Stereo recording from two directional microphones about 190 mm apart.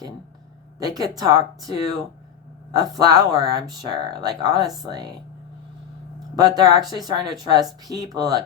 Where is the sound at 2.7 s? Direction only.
20° right (ahead or behind).